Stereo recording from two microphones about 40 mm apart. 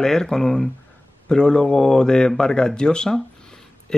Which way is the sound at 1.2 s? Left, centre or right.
Left.